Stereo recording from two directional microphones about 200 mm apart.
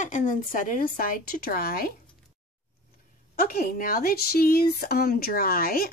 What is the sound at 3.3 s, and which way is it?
Speech, 50° left (ahead or behind).